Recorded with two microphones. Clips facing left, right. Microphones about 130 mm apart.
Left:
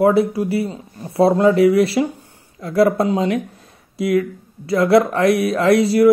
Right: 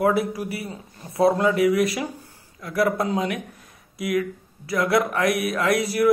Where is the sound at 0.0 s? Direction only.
30° left (ahead or behind).